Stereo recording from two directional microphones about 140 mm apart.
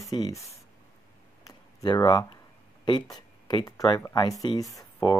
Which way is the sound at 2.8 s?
30° left (ahead or behind).